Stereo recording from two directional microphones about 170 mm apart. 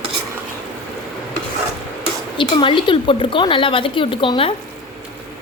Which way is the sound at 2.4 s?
30° left (ahead or behind).